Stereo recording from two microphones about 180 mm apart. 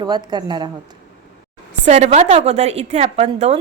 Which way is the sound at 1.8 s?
40° right (ahead or behind).